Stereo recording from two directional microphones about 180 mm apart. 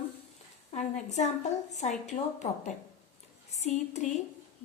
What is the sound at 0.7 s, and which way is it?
A woman's voice, 40° left (ahead or behind).